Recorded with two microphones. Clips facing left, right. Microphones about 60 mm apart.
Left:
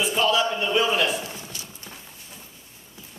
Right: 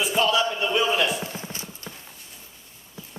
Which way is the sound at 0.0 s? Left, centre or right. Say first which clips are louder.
Even; centre.